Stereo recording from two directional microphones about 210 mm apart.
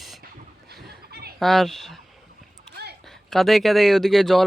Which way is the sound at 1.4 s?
Centre (ahead or behind).